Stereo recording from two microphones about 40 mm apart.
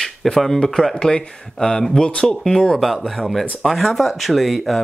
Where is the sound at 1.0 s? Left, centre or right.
Centre.